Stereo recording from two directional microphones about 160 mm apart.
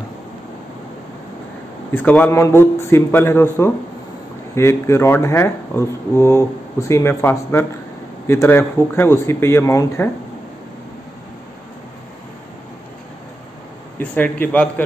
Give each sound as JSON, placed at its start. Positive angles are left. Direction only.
{"t": 1.9, "sound": "speech", "side_deg": 10}
{"t": 13.9, "sound": "speech", "side_deg": 10}